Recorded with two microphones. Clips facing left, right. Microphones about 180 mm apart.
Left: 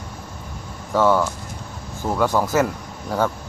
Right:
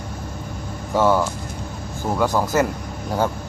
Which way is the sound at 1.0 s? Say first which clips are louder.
Even; 10° right (ahead or behind).